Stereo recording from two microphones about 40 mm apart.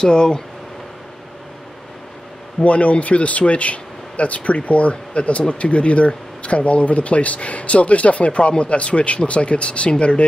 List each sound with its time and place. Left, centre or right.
0.0 s speech: centre
2.6 s speech: left